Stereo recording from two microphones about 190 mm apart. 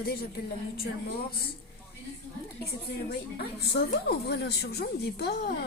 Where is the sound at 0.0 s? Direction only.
55° left (ahead or behind).